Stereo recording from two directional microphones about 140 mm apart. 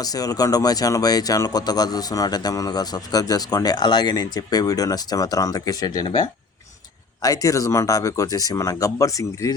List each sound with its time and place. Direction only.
0.0 s speech: 25° left (ahead or behind)
7.2 s speech: 25° left (ahead or behind)